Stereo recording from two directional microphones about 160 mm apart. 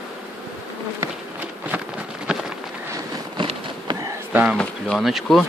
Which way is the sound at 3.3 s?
30° right (ahead or behind).